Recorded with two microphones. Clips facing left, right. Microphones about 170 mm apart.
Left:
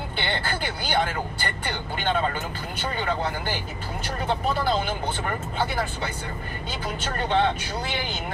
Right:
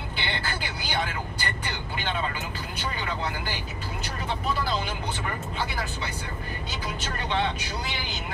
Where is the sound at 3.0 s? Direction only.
50° left (ahead or behind).